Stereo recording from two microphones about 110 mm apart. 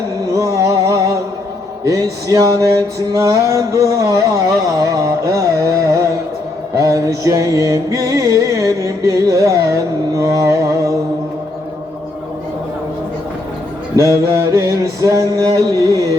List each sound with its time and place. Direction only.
0.3 s music: 30° right (ahead or behind)
13.9 s music: 25° right (ahead or behind)